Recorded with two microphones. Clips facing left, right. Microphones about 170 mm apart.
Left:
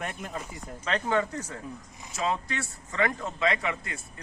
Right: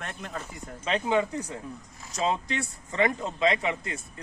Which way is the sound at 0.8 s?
15° right (ahead or behind).